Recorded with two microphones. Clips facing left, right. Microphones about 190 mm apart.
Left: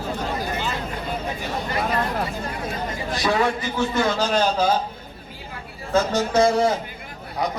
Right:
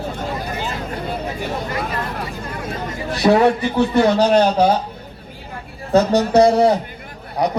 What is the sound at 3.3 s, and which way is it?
A man's voice, 60° right (ahead or behind).